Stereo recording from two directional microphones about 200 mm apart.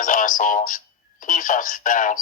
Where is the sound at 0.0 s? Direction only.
40° left (ahead or behind).